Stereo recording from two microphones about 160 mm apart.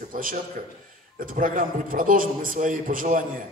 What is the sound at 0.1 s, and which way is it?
A man's voice, 60° right (ahead or behind).